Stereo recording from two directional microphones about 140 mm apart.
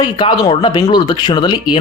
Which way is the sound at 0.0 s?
35° left (ahead or behind).